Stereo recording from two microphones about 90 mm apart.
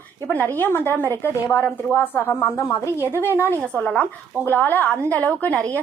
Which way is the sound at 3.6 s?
10° left (ahead or behind).